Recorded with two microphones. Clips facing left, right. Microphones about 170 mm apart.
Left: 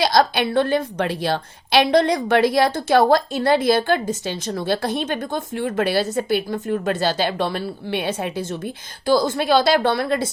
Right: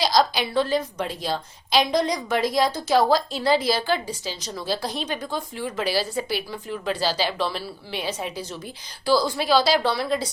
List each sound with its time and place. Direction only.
0.0 s a woman's voice: 60° left (ahead or behind)